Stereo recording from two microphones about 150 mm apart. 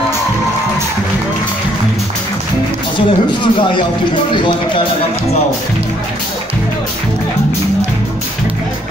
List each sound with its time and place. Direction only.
3.3 s speech: 35° left (ahead or behind)